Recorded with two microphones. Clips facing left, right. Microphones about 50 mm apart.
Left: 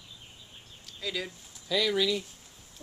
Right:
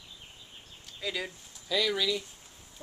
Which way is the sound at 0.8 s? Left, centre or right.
Centre.